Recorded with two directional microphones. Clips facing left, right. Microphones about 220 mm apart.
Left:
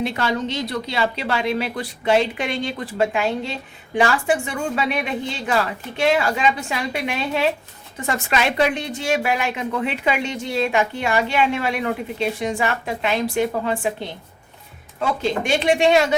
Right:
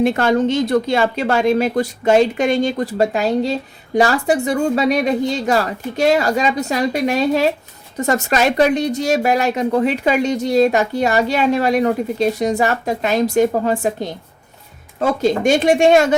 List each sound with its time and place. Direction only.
0.0 s speech: 50° right (ahead or behind)